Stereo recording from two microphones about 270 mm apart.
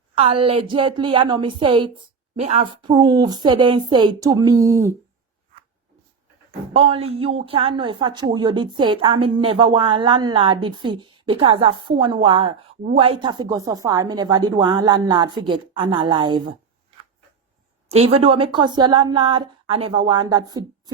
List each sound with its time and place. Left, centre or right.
0.2 s a woman's voice: right
6.7 s a woman's voice: right
17.8 s a woman's voice: right